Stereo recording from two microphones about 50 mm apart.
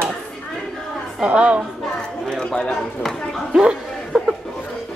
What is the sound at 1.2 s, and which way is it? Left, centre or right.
Speech, right.